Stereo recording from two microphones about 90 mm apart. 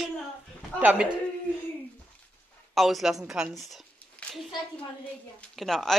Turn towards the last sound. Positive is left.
turn(degrees=0)  # may be behind; listen again after turning